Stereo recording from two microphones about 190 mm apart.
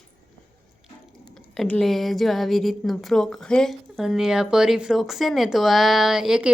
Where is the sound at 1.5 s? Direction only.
5° left (ahead or behind).